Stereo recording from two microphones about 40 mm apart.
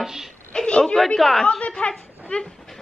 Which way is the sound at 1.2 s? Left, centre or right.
Centre.